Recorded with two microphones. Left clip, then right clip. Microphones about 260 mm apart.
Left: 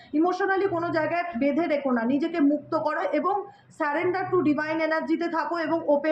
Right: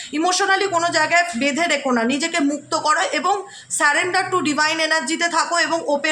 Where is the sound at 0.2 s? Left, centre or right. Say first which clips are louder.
Right 6 dB; right.